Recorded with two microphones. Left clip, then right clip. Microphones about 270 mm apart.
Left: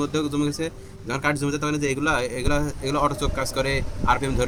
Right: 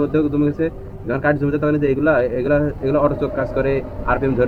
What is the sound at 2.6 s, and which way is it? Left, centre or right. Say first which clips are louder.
Speech: right 6 dB; left.